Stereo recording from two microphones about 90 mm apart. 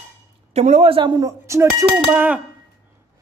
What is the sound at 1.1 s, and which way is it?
Speech, 35° right (ahead or behind).